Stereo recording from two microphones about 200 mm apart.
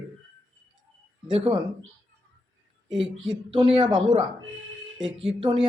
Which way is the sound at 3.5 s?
25° right (ahead or behind).